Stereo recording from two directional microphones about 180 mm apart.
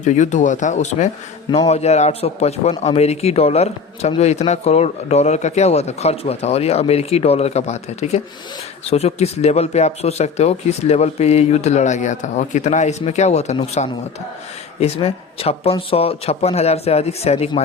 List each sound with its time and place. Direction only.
0.0 s a man's voice: 40° left (ahead or behind)